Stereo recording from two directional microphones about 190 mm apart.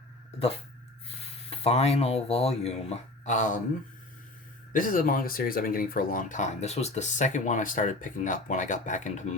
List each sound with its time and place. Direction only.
1.0 s speech: 30° left (ahead or behind)
4.7 s speech: 45° left (ahead or behind)